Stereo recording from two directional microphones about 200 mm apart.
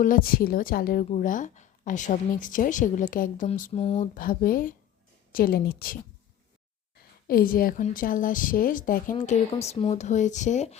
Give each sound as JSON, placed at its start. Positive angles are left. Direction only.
{"t": 0.0, "sound": "a woman's voice", "side_deg": 45}
{"t": 7.3, "sound": "a woman's voice", "side_deg": 45}